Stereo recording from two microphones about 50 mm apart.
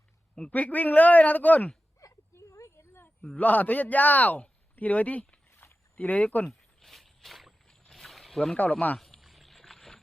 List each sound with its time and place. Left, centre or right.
0.5 s a man's voice: left
2.0 s a sound: left
3.2 s a man's voice: left
3.4 s a man's voice: left
5.5 s a sound: left
6.0 s speech: left
6.4 s a sound: centre
7.7 s boat: centre
8.6 s speech: centre
9.0 s rowboat: centre